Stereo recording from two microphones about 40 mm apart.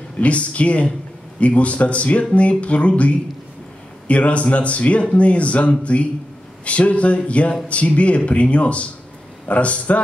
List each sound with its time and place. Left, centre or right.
0.2 s speech: left
4.1 s speech: left